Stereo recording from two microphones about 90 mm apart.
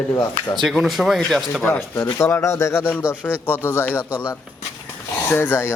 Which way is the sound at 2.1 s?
30° left (ahead or behind).